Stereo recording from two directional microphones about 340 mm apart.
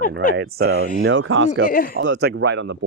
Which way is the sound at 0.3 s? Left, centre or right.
Right.